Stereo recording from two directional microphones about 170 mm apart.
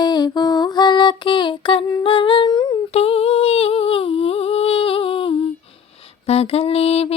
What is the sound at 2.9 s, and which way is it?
Humming, 35° left (ahead or behind).